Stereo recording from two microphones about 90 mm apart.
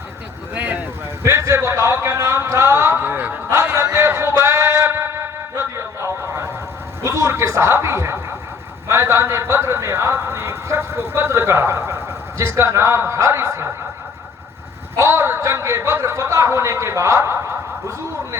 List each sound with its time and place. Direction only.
0.5 s a sound: 20° right (ahead or behind)
1.2 s a sound: 30° right (ahead or behind)
3.5 s music: 30° right (ahead or behind)
7.0 s chuckle: 30° right (ahead or behind)
8.9 s speech: 30° right (ahead or behind)
14.9 s speech: 30° right (ahead or behind)